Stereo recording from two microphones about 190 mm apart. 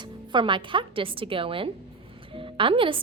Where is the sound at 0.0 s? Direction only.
25° right (ahead or behind).